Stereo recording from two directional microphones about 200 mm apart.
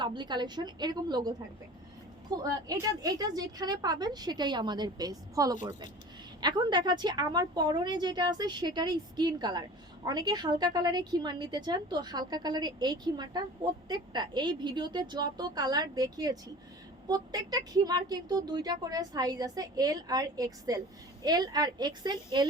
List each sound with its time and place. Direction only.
0.0 s a woman's voice: 20° right (ahead or behind)